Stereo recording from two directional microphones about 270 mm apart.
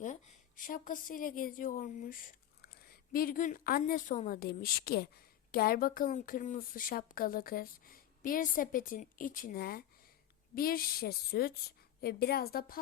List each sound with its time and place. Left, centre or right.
0.0 s a woman's voice: left